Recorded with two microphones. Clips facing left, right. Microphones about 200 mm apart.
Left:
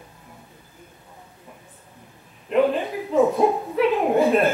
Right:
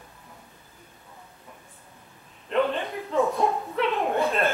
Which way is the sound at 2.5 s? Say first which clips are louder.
Left 5 dB; 5° left (ahead or behind).